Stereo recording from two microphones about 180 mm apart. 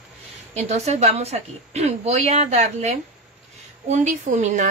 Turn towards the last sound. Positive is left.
turn(degrees=-40)  # may be behind; listen again after turning